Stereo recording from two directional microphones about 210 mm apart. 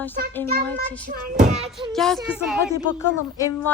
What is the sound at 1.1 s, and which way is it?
Speech, 40° right (ahead or behind).